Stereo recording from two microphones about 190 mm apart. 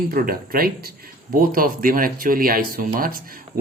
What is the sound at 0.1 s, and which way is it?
Speech, 50° right (ahead or behind).